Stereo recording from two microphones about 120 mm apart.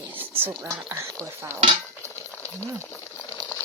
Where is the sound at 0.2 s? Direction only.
15° right (ahead or behind).